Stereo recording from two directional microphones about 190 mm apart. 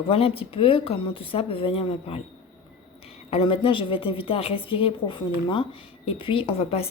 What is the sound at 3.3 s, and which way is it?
A woman's voice, 30° left (ahead or behind).